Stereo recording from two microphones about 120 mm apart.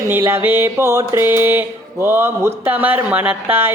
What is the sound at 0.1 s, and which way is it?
Speech, 20° right (ahead or behind).